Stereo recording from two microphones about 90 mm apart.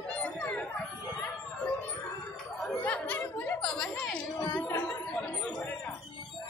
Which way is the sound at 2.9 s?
15° left (ahead or behind).